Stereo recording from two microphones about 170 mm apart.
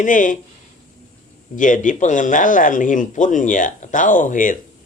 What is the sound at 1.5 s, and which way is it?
A man's voice, 50° left (ahead or behind).